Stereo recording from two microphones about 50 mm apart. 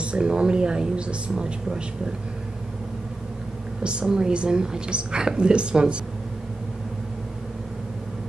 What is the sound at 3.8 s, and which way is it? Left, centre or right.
A woman's voice, centre.